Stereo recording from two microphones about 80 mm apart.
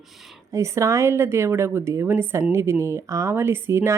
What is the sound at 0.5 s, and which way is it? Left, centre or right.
Speech, right.